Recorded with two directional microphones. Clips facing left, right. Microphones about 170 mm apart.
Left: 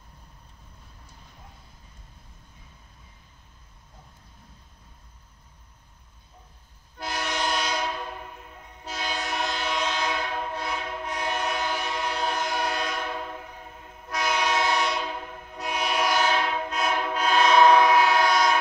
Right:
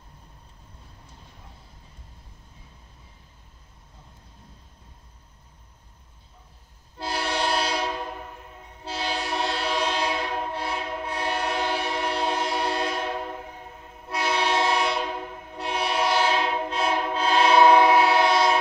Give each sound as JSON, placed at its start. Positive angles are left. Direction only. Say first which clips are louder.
{"t": 7.0, "sound": "train", "louder": "right 2 dB", "side_deg": -30}
{"t": 14.0, "sound": "train", "louder": "right 1 dB", "side_deg": -30}